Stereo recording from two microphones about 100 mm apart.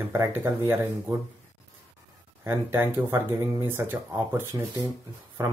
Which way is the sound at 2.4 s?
25° right (ahead or behind).